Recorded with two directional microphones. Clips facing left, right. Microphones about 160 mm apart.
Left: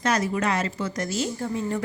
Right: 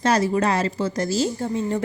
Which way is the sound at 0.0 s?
30° right (ahead or behind).